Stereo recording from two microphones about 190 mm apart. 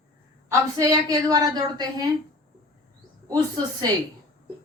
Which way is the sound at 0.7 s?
20° right (ahead or behind).